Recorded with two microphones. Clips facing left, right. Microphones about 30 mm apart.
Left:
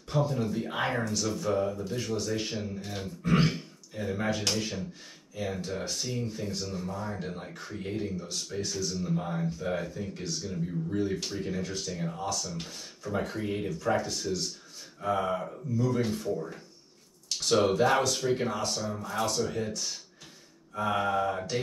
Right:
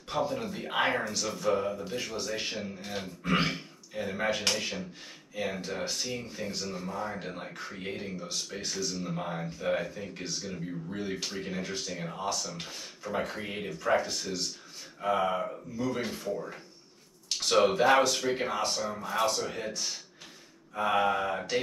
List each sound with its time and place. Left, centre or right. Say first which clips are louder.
0.1 s speech: left 2 dB; right
0.7 s speech: right 1 dB; right